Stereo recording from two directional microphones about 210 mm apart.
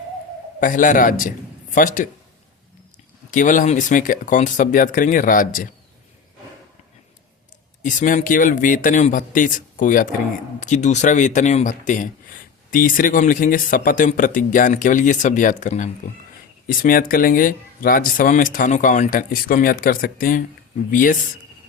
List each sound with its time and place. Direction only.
0.6 s speech: 40° left (ahead or behind)
3.3 s speech: 40° left (ahead or behind)
7.8 s speech: 35° left (ahead or behind)